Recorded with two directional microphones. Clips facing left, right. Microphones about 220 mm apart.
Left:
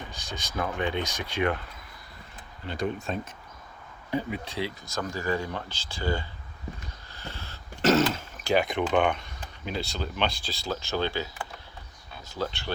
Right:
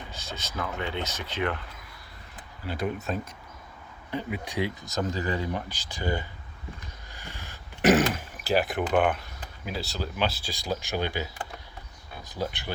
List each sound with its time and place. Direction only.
0.1 s speech: 15° left (ahead or behind)
2.6 s speech: 5° right (ahead or behind)
4.4 s speech: 15° right (ahead or behind)
7.1 s throat clearing: 15° right (ahead or behind)
8.9 s speech: 5° right (ahead or behind)
12.3 s speech: 15° right (ahead or behind)